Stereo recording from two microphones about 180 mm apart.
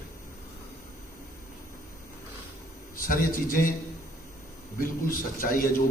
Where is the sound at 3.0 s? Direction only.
50° left (ahead or behind).